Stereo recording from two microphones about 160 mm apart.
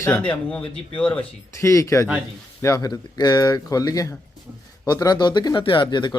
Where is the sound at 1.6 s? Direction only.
20° left (ahead or behind).